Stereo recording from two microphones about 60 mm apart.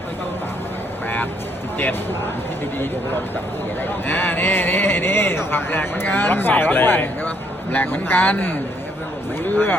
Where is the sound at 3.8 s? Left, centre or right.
Left.